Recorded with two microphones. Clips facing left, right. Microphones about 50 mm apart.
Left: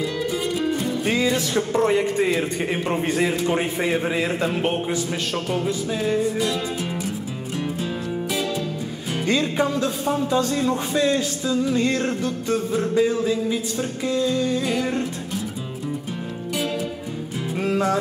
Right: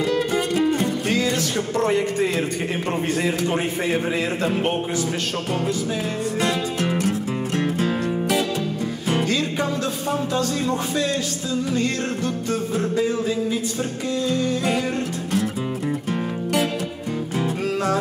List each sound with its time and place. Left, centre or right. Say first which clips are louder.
0.1 s music: right 3 dB; right
1.0 s music: even; centre
6.2 s music: right 1 dB; right
9.2 s music: left 6 dB; centre
11.0 s music: left 3 dB; centre
17.6 s music: left 4 dB; centre